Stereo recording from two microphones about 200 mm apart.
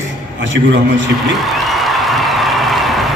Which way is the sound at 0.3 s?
65° right (ahead or behind).